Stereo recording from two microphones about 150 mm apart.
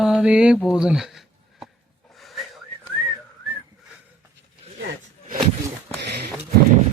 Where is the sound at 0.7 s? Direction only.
5° right (ahead or behind).